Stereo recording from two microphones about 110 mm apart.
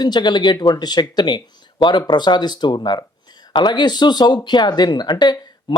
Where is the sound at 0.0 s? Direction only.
40° left (ahead or behind).